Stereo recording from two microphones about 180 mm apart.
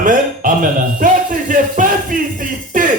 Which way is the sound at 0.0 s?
50° right (ahead or behind).